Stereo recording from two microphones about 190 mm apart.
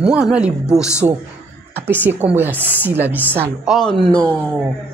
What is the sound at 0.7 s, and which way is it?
Speech, 15° left (ahead or behind).